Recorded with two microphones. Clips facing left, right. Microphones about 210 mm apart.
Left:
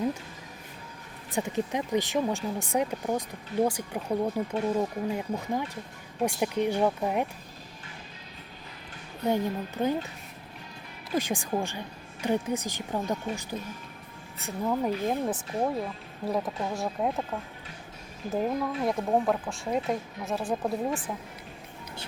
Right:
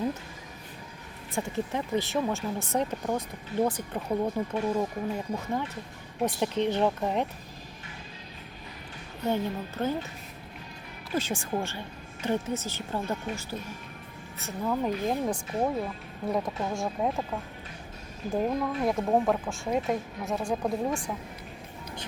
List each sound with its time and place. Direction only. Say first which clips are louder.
1.3 s speech: left 2 dB; 15° left (ahead or behind)
9.3 s speech: left 2 dB; 15° left (ahead or behind)
11.1 s speech: left 1 dB; 15° left (ahead or behind)
18.3 s speech: right 1 dB; centre (ahead or behind)